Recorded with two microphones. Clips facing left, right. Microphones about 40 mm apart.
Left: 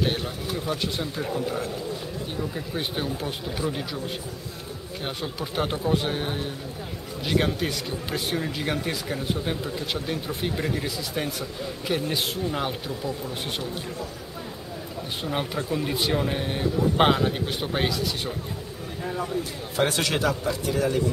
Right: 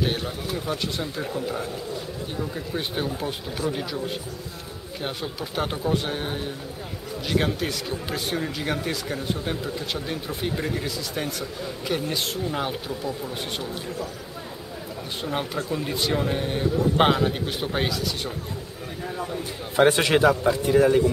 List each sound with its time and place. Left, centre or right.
0.0 s speech: centre
15.2 s speech: centre
19.0 s a sound: centre
19.8 s speech: right